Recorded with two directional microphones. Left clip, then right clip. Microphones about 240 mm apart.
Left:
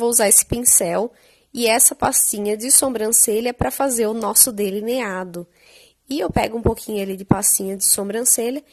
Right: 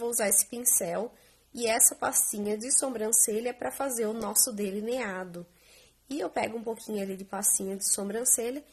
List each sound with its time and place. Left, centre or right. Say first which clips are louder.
0.0 s a woman's voice: left 11 dB; left